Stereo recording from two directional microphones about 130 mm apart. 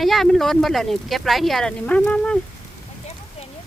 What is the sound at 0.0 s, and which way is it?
Speech, centre (ahead or behind).